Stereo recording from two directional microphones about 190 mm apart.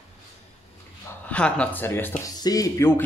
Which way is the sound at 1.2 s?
5° left (ahead or behind).